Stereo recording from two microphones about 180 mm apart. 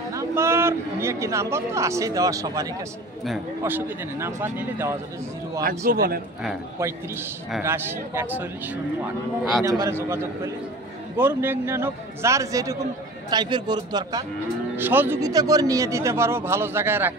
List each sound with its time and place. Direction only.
0.1 s speech: 15° right (ahead or behind)
5.9 s a man's voice: 55° right (ahead or behind)
6.8 s speech: 15° right (ahead or behind)
14.8 s speech: 10° right (ahead or behind)